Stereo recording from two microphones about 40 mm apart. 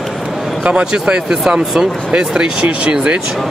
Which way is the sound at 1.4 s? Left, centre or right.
Centre.